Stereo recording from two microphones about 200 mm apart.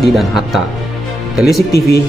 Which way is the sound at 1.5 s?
50° left (ahead or behind).